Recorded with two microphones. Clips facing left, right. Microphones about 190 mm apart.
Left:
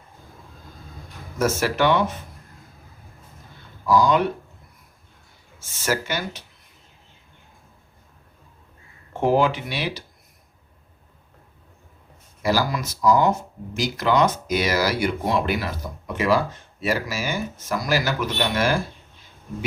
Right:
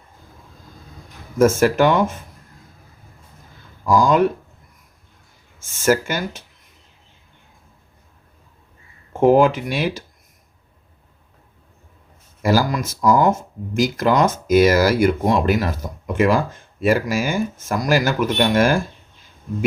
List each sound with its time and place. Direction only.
1.4 s speech: 50° right (ahead or behind)
3.8 s speech: 45° right (ahead or behind)
5.5 s speech: 50° right (ahead or behind)
9.4 s speech: 45° right (ahead or behind)
12.4 s speech: 45° right (ahead or behind)